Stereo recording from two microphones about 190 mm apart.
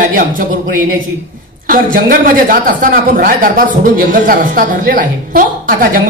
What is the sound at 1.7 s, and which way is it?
A man's voice, 50° right (ahead or behind).